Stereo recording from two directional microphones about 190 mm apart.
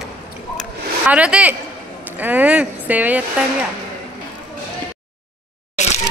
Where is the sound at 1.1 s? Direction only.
5° right (ahead or behind).